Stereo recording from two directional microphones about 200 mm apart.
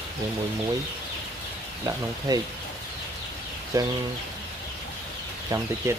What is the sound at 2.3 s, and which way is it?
Speech, 20° right (ahead or behind).